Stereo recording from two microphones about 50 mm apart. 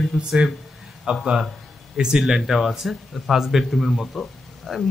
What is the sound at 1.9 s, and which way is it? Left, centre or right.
Speech, centre.